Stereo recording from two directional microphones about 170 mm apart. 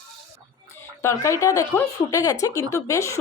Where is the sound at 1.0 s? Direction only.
15° left (ahead or behind).